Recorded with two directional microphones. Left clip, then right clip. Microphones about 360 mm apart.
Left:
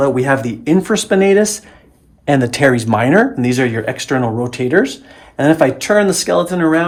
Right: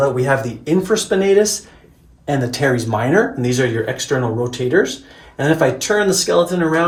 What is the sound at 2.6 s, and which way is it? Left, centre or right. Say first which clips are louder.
Speech: left 4 dB; centre.